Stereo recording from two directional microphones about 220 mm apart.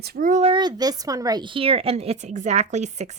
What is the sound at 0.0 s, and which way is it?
A woman's voice, 35° right (ahead or behind).